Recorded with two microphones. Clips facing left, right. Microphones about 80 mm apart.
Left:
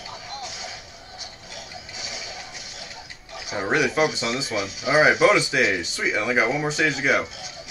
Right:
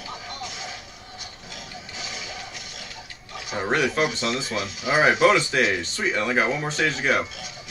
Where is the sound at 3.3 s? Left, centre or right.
Centre.